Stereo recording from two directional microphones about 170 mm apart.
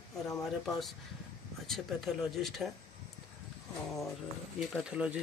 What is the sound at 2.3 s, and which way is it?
Speech, centre (ahead or behind).